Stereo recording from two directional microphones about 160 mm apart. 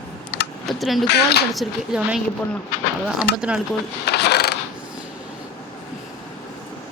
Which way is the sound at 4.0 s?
90° left.